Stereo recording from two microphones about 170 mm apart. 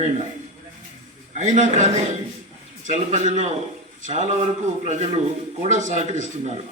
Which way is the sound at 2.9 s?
45° right (ahead or behind).